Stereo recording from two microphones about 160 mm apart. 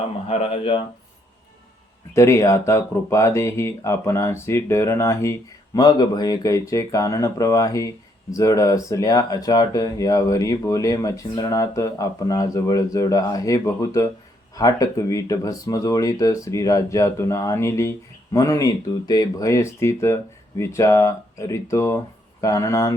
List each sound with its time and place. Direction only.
0.3 s speech: 35° left (ahead or behind)
2.1 s speech: 15° left (ahead or behind)